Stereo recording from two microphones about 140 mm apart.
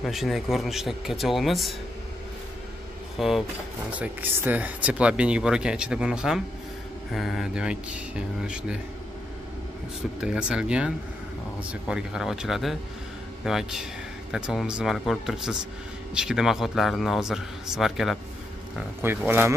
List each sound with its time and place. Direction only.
0.0 s speech: centre (ahead or behind)
3.2 s speech: centre (ahead or behind)
4.0 s speech: 15° right (ahead or behind)
10.2 s speech: 5° right (ahead or behind)
18.9 s speech: 15° right (ahead or behind)